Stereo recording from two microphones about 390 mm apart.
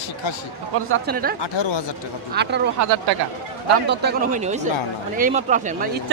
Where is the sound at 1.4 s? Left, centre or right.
Left.